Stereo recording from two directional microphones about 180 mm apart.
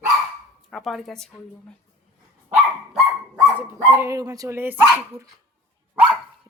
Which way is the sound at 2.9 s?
10° right (ahead or behind).